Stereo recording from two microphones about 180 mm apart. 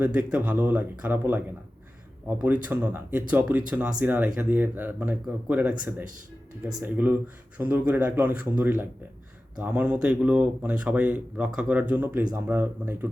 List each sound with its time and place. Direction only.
0.0 s speech: 5° right (ahead or behind)
6.7 s speech: 20° right (ahead or behind)
6.9 s speech: 10° right (ahead or behind)